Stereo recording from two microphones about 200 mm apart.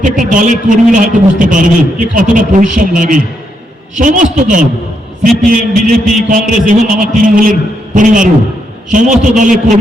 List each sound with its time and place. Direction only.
0.0 s a man's voice: 40° right (ahead or behind)